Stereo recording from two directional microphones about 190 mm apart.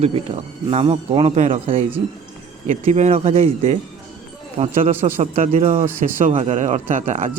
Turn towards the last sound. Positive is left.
turn(degrees=-40)  # may be behind; listen again after turning